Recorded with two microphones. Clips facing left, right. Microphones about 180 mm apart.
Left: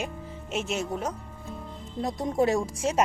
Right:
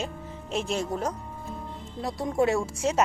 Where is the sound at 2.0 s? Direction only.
20° left (ahead or behind).